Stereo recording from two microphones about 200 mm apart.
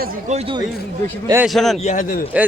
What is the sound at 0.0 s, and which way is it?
Speech, 45° right (ahead or behind).